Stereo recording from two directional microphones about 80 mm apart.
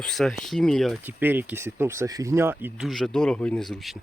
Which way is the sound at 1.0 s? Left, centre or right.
Right.